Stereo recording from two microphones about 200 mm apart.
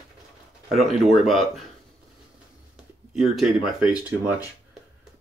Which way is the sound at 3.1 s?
Centre (ahead or behind).